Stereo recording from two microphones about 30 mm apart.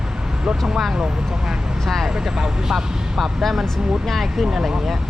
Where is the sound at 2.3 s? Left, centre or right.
Right.